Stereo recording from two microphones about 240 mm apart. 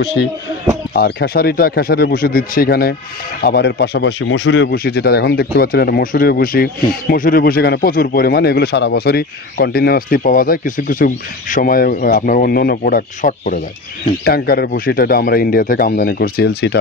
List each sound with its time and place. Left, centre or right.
0.0 s speech: left